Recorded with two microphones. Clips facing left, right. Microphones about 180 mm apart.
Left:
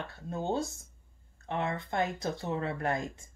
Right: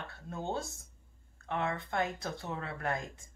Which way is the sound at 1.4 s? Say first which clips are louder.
Left 2 dB; 20° left (ahead or behind).